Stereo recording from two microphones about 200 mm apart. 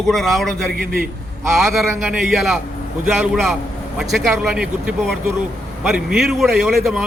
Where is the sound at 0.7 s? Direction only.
45° right (ahead or behind).